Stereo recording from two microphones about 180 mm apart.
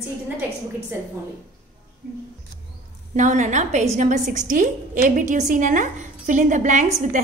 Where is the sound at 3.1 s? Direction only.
45° right (ahead or behind).